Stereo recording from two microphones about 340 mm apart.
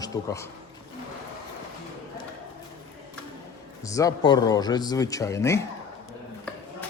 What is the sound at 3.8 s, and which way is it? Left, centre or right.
A man's voice, centre.